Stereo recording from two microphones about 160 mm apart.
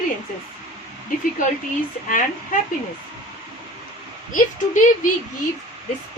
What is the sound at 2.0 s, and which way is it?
Speech, 55° left (ahead or behind).